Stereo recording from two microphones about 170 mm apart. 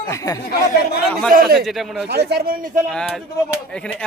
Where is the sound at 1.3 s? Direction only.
60° right (ahead or behind).